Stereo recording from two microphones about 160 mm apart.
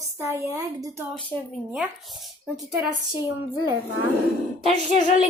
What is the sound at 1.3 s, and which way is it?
Speech, 15° left (ahead or behind).